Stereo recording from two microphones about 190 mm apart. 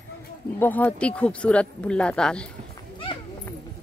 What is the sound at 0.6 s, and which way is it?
Speech, 10° left (ahead or behind).